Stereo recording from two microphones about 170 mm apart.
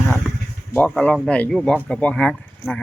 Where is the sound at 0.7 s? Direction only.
10° left (ahead or behind).